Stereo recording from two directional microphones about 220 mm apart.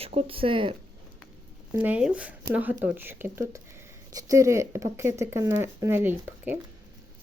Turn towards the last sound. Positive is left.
turn(degrees=-10)  # may be behind; listen again after turning